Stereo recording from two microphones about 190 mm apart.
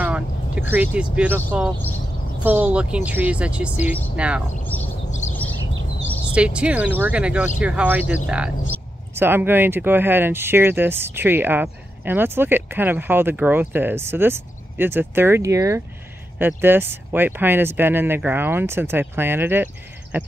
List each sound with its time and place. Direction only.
0.0 s speech: 10° right (ahead or behind)
6.3 s speech: 5° right (ahead or behind)